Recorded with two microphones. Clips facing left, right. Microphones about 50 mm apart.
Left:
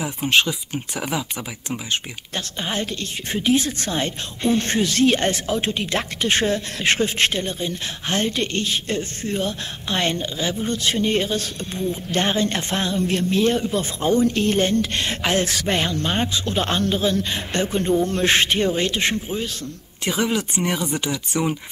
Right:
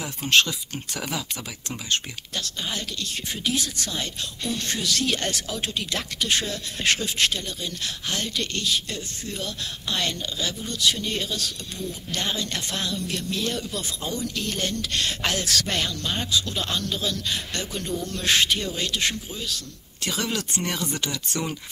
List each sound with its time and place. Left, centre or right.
0.0 s speech: centre
2.3 s speech: left
20.1 s speech: centre